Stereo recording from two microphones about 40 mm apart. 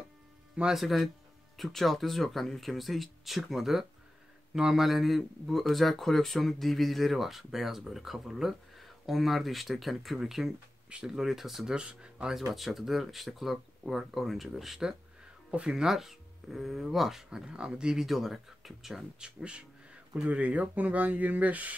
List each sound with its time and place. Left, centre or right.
0.7 s a man's voice: centre
10.1 s speech: centre
11.6 s speech: right
12.3 s a man's voice: centre
15.5 s speech: right
15.8 s speech: centre
17.3 s speech: right
18.0 s a man's voice: centre
19.1 s speech: right
20.2 s speech: right